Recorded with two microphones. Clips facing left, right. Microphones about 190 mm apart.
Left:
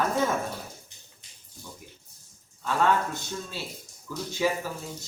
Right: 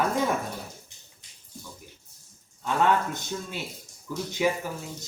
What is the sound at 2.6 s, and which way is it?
Speech, 20° right (ahead or behind).